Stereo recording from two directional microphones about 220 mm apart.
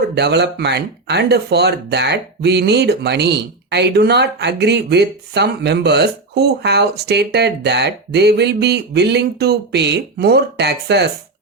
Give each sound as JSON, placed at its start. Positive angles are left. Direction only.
{"t": 0.1, "sound": "speech", "side_deg": -50}